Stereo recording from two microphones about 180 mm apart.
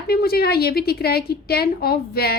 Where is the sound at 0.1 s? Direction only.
60° left (ahead or behind).